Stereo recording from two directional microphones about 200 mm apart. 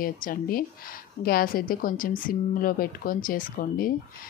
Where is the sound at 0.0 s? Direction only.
45° left (ahead or behind).